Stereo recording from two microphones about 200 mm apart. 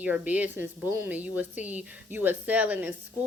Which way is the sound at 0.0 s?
10° right (ahead or behind).